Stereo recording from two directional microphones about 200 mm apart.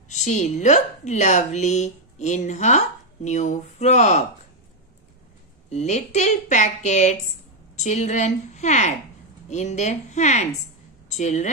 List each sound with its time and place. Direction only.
0.1 s speech: 35° left (ahead or behind)
5.7 s a woman's voice: 35° left (ahead or behind)